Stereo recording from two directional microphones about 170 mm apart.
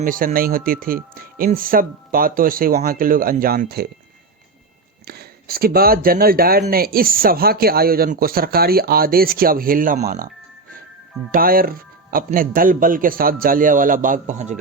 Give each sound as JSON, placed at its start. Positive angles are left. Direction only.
{"t": 0.0, "sound": "speech", "side_deg": -55}
{"t": 5.0, "sound": "speech", "side_deg": -65}
{"t": 11.3, "sound": "speech", "side_deg": -60}